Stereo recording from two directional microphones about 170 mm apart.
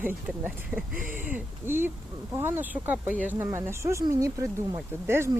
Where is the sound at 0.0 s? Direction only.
10° right (ahead or behind).